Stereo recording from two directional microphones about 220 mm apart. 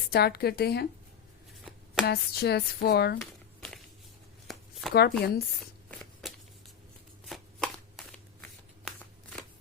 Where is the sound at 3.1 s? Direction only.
5° left (ahead or behind).